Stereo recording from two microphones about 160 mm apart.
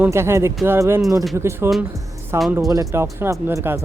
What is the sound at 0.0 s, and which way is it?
Speech, 15° right (ahead or behind).